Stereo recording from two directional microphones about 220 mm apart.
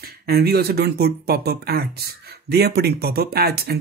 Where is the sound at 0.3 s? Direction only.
45° right (ahead or behind).